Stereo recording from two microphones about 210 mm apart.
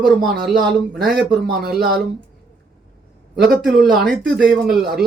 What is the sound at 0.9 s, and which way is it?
Speech, centre (ahead or behind).